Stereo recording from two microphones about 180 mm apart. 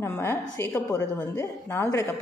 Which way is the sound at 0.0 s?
15° left (ahead or behind).